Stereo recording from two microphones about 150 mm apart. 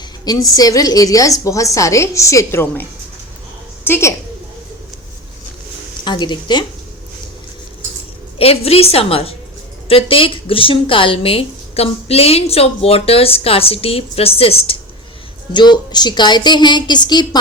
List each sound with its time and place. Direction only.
0.3 s a woman's voice: 25° left (ahead or behind)
3.8 s a woman's voice: 15° left (ahead or behind)
6.1 s a woman's voice: 30° left (ahead or behind)
8.4 s a woman's voice: 40° left (ahead or behind)